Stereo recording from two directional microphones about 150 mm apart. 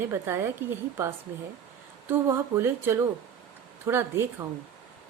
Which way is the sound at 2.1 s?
15° right (ahead or behind).